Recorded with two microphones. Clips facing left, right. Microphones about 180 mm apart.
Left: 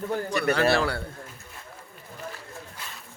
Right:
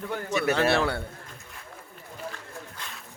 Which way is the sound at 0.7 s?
20° right (ahead or behind).